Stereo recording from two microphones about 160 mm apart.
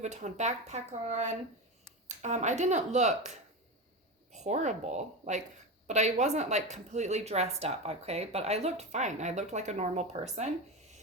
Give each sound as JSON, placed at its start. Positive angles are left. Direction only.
{"t": 0.0, "sound": "a woman's voice", "side_deg": -45}